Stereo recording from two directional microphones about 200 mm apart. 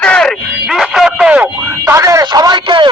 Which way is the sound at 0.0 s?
5° left (ahead or behind).